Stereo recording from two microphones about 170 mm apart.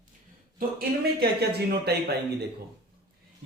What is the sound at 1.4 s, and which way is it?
Speech, 70° right (ahead or behind).